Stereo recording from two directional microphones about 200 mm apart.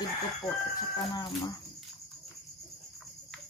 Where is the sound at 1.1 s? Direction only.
20° left (ahead or behind).